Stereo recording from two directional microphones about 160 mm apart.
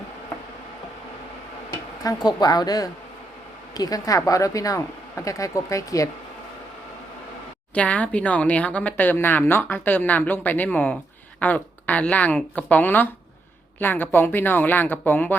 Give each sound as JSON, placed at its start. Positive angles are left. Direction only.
{"t": 2.0, "sound": "speech", "side_deg": 25}
{"t": 7.7, "sound": "speech", "side_deg": 10}